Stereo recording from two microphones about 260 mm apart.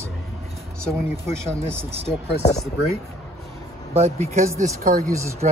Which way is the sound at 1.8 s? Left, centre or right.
Right.